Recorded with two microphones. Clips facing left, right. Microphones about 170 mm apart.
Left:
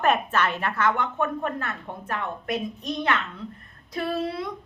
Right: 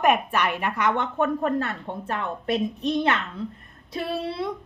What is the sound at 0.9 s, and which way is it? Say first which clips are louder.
A woman's voice: right 3 dB; 30° right (ahead or behind).